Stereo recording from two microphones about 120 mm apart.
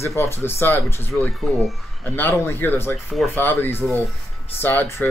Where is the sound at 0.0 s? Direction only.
25° left (ahead or behind).